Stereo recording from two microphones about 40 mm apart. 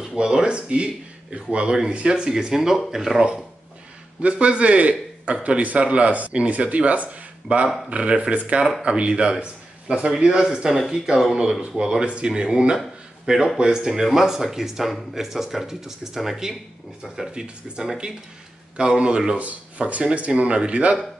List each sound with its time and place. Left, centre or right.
0.1 s speech: centre
4.2 s a man's voice: right